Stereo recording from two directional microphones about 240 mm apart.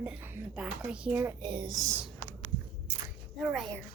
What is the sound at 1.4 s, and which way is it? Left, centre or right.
Speech, centre.